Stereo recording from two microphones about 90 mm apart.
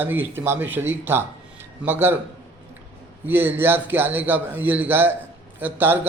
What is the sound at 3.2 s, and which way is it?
A man's voice, 20° right (ahead or behind).